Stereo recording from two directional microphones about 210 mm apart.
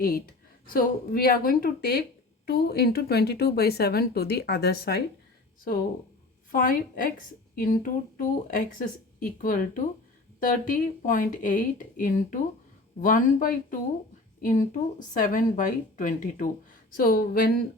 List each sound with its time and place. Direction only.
0.7 s speech: 45° left (ahead or behind)
6.5 s speech: 40° left (ahead or behind)